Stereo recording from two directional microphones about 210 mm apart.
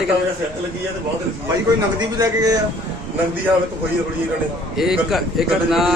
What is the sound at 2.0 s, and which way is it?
Speech, 15° right (ahead or behind).